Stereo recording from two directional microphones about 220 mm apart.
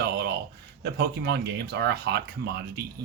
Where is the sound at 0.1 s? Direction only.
50° right (ahead or behind).